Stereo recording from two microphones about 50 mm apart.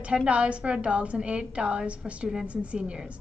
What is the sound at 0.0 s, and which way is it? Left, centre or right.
A woman's voice, right.